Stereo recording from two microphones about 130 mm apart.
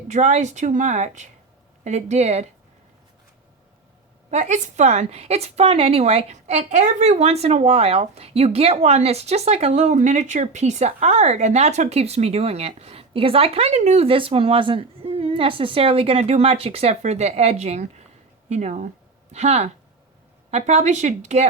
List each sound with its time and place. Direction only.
0.1 s a woman's voice: 65° right (ahead or behind)
4.3 s a woman's voice: 65° right (ahead or behind)